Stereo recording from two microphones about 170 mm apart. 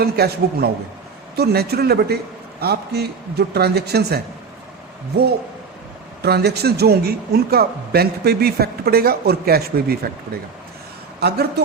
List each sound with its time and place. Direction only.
0.0 s speech: 65° right (ahead or behind)
11.2 s speech: 75° right (ahead or behind)